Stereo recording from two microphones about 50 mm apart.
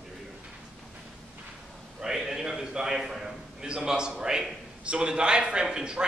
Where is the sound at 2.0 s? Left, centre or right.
Centre.